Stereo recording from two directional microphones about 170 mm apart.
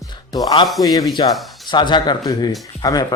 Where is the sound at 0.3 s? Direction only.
25° left (ahead or behind).